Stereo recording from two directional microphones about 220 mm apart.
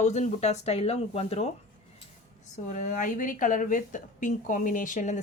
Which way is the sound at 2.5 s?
35° left (ahead or behind).